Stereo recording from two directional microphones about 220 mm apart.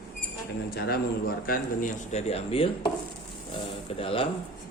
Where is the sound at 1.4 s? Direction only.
40° left (ahead or behind).